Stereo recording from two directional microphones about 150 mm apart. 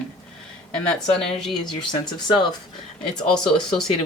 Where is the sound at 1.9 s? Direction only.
30° left (ahead or behind).